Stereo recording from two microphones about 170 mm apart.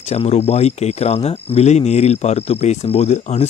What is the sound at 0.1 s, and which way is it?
Speech, 40° left (ahead or behind).